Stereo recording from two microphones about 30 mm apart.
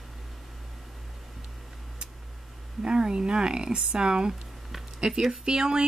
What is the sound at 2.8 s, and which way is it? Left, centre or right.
A woman's voice, right.